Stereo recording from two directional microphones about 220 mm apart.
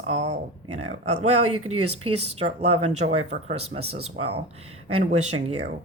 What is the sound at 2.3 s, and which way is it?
Speech, 30° right (ahead or behind).